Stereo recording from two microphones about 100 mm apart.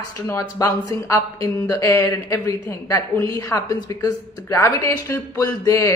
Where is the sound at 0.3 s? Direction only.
30° left (ahead or behind).